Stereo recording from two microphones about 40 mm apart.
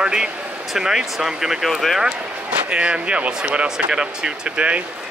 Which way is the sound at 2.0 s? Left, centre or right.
Right.